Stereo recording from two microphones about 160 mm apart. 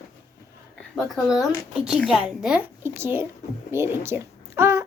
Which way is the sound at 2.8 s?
15° right (ahead or behind).